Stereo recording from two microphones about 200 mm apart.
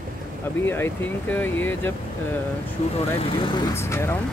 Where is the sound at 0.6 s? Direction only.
10° left (ahead or behind).